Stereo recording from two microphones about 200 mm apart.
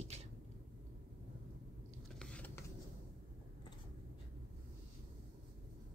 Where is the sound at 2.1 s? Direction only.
5° left (ahead or behind).